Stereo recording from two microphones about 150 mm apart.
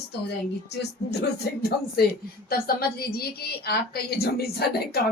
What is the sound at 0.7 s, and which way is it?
Speech, 90° left.